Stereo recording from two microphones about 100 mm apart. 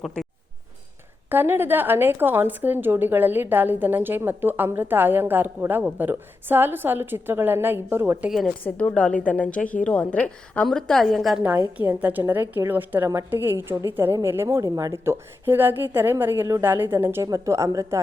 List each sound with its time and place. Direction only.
1.3 s speech: 20° right (ahead or behind)
8.3 s a woman's voice: 5° right (ahead or behind)
8.6 s a woman's voice: 10° left (ahead or behind)
11.9 s speech: 15° right (ahead or behind)